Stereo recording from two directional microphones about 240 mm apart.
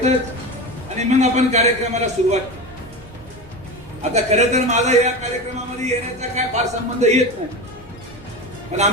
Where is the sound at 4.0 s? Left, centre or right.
Right.